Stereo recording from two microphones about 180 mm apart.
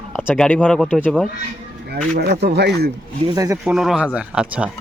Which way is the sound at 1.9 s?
65° right (ahead or behind).